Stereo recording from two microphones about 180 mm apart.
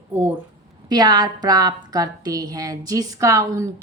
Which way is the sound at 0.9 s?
25° right (ahead or behind).